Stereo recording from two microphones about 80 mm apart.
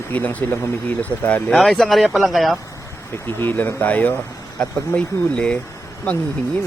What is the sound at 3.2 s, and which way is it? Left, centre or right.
Speech, left.